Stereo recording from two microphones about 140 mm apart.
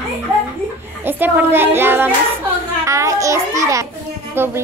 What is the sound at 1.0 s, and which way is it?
A child's voice, 15° right (ahead or behind).